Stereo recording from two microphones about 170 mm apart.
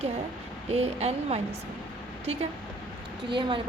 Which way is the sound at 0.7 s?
40° right (ahead or behind).